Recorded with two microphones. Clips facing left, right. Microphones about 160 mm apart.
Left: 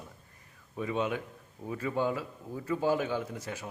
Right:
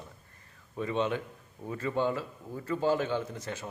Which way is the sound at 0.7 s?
5° left (ahead or behind).